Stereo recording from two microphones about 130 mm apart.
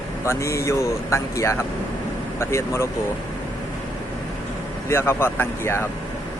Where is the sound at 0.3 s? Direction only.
20° left (ahead or behind).